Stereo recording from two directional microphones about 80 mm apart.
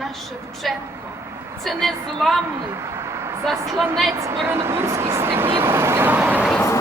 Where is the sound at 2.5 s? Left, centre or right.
Right.